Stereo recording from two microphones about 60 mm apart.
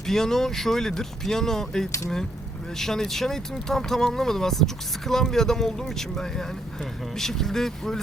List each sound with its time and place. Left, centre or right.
0.0 s speech: centre